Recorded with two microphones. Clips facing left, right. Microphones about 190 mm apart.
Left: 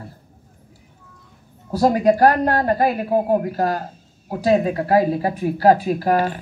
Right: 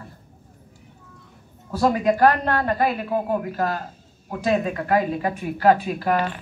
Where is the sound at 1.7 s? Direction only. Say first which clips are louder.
Left 4 dB; 40° left (ahead or behind).